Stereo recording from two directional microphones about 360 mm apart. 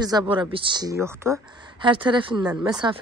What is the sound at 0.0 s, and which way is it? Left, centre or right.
Speech, centre.